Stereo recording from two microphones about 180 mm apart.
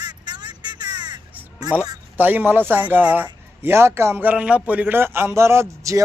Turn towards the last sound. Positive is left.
turn(degrees=-15)  # may be behind; listen again after turning